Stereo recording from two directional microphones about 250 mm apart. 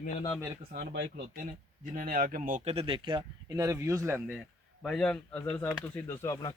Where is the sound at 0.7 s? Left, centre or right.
Right.